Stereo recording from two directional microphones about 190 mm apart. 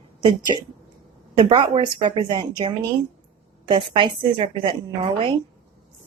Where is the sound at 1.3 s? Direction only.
25° right (ahead or behind).